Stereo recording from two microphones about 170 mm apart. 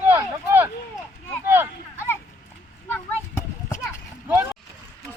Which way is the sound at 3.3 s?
15° left (ahead or behind).